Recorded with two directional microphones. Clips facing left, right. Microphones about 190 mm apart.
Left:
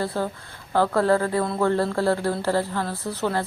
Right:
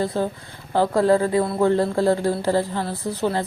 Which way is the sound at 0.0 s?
20° right (ahead or behind).